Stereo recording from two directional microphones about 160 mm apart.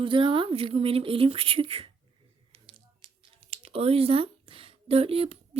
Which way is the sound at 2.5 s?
35° right (ahead or behind).